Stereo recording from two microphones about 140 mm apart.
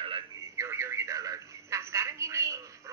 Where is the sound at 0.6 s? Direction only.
20° right (ahead or behind).